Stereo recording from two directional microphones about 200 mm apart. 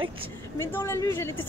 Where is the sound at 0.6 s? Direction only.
10° left (ahead or behind).